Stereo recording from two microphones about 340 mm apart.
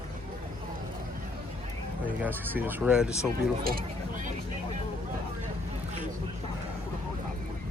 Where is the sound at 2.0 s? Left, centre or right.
Centre.